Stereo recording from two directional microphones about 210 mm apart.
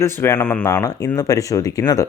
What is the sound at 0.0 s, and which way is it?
Speech, 10° left (ahead or behind).